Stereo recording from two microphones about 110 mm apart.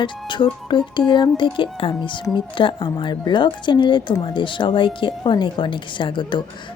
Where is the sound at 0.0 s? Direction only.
45° left (ahead or behind).